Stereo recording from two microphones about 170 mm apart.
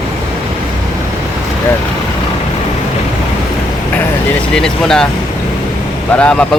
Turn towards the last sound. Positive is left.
turn(degrees=5)  # may be behind; listen again after turning